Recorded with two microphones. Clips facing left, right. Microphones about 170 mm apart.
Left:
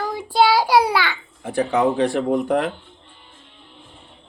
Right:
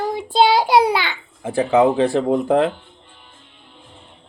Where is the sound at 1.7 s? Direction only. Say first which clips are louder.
Right 4 dB; 25° right (ahead or behind).